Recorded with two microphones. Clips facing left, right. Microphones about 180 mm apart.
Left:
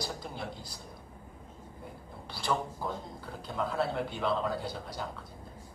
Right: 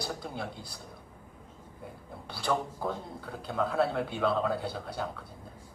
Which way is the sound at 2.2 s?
60° right (ahead or behind).